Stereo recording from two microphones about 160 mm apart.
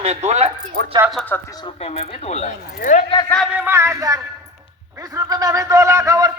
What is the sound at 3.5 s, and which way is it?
Speech, 15° right (ahead or behind).